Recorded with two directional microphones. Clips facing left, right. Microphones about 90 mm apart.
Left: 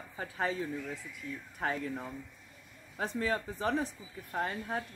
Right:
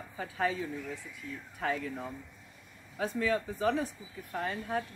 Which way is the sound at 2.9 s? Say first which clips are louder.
Right 2 dB; 35° left (ahead or behind).